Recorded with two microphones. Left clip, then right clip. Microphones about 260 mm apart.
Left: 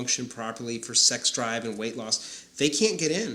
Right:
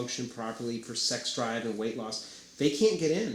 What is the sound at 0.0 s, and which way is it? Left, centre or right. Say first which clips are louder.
Speech: left 5 dB; left.